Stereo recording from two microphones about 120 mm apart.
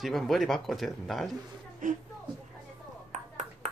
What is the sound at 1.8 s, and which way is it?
Speech, 90° right.